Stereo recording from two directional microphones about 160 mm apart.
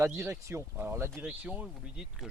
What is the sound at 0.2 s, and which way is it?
Speech, 15° right (ahead or behind).